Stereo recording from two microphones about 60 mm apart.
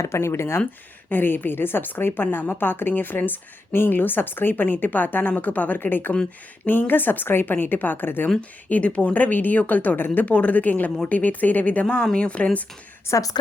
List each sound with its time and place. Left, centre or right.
0.0 s speech: left
1.1 s a woman's voice: left
8.4 s a woman's voice: left
13.1 s a woman's voice: left